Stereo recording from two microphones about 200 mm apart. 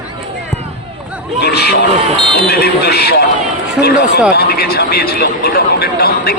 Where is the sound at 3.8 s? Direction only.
55° left (ahead or behind).